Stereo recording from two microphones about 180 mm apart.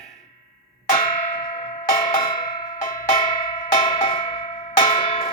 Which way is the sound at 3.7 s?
25° left (ahead or behind).